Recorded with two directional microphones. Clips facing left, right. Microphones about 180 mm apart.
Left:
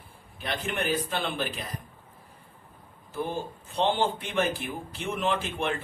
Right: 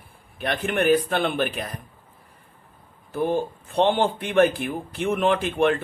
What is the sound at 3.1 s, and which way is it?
Speech, 55° right (ahead or behind).